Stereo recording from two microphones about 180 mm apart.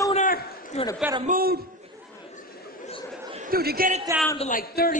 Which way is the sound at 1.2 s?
55° right (ahead or behind).